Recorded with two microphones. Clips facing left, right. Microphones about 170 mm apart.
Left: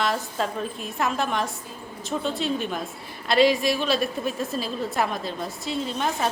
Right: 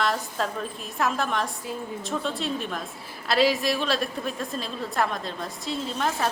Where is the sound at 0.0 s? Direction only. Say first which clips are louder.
Left 1 dB; centre (ahead or behind).